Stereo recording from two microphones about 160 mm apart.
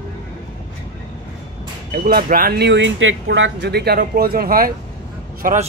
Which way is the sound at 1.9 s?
70° right (ahead or behind).